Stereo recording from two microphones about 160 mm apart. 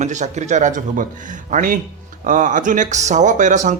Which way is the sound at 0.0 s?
50° right (ahead or behind).